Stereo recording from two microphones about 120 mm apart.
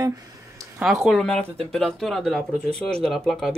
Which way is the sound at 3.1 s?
5° left (ahead or behind).